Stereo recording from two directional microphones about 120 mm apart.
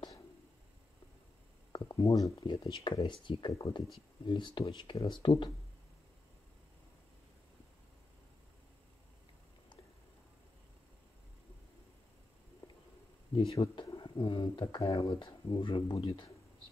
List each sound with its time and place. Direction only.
1.7 s a sound: 40° left (ahead or behind)
2.0 s speech: 25° left (ahead or behind)
2.4 s speech: 50° left (ahead or behind)
13.3 s speech: 50° left (ahead or behind)
13.6 s speech: 35° left (ahead or behind)
14.8 s speech: 25° left (ahead or behind)
15.1 s speech: 45° left (ahead or behind)